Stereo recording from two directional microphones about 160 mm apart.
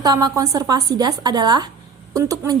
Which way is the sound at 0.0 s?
25° right (ahead or behind).